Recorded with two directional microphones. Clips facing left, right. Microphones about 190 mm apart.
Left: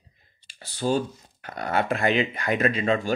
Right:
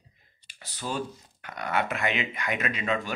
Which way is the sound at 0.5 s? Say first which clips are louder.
Left 9 dB; 30° left (ahead or behind).